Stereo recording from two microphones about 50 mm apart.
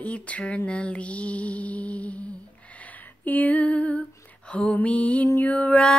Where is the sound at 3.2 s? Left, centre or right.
Left.